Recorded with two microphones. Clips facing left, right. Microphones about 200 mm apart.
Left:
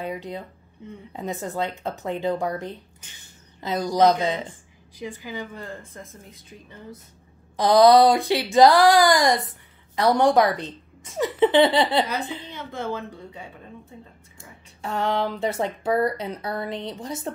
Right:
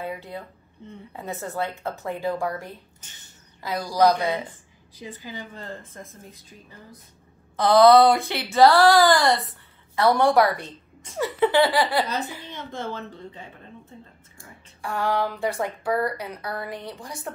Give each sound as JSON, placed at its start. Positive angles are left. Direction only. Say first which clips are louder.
{"t": 0.0, "sound": "a woman's voice", "louder": "left 2 dB", "side_deg": 20}
{"t": 7.5, "sound": "a woman's voice", "louder": "even", "side_deg": 15}
{"t": 12.4, "sound": "a woman's voice", "louder": "left 2 dB", "side_deg": 10}
{"t": 14.4, "sound": "speech", "louder": "left 1 dB", "side_deg": 20}